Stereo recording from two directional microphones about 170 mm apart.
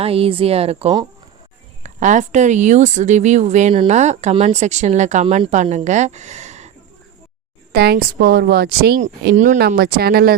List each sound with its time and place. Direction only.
0.0 s speech: 35° right (ahead or behind)
1.8 s speech: 45° right (ahead or behind)
7.7 s a woman's voice: 70° right (ahead or behind)
9.3 s speech: 50° right (ahead or behind)